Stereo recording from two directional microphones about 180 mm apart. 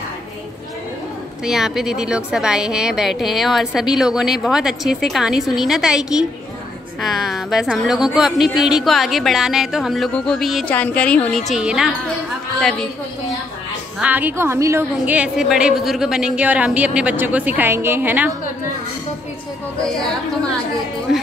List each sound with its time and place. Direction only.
1.4 s a woman's voice: centre (ahead or behind)
13.9 s a woman's voice: 10° right (ahead or behind)